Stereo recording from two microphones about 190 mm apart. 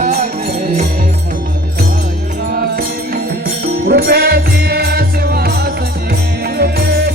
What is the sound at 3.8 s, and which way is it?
Music, 55° right (ahead or behind).